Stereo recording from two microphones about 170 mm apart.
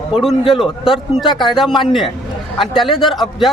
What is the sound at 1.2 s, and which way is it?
Speech, 25° left (ahead or behind).